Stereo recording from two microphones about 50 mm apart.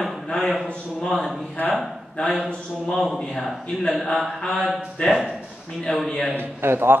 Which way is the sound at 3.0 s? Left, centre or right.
Centre.